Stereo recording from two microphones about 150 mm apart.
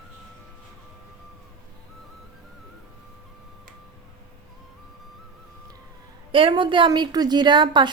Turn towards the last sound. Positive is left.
turn(degrees=-30)  # may be behind; listen again after turning